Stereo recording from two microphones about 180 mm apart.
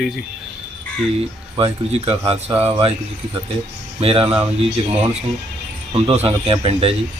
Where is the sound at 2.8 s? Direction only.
30° right (ahead or behind).